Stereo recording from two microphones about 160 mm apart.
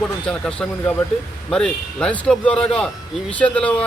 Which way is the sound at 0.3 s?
5° left (ahead or behind).